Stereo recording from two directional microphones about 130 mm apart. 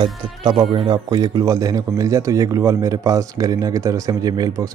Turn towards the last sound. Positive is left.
turn(degrees=-30)  # may be behind; listen again after turning